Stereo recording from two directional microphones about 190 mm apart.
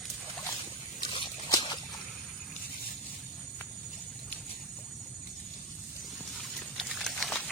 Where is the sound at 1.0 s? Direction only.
25° left (ahead or behind).